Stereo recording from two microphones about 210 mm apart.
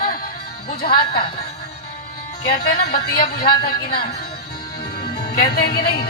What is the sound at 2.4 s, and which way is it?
Speech, 50° left (ahead or behind).